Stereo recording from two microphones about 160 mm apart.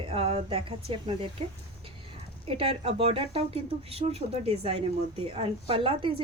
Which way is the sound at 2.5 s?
35° right (ahead or behind).